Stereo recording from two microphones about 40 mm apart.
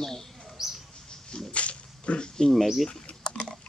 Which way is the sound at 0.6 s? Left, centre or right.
Centre.